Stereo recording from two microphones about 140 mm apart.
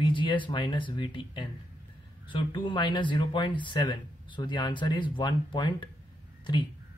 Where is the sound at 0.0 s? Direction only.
35° left (ahead or behind).